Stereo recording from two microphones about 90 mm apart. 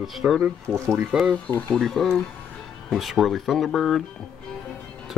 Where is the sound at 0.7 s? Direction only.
30° right (ahead or behind).